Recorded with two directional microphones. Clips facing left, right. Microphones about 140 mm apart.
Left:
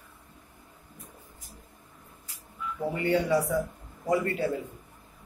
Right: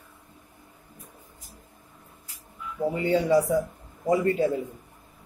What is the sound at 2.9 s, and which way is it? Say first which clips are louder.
Speech: right 3 dB; 20° right (ahead or behind).